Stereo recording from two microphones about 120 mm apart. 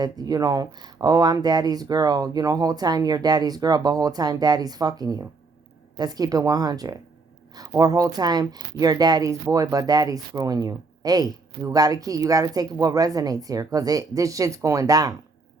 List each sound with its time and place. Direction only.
0.0 s a woman's voice: 35° right (ahead or behind)